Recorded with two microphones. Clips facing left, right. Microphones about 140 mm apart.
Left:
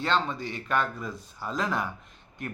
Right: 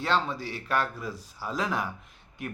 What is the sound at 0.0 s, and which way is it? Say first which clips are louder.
Speech: even; 5° right (ahead or behind).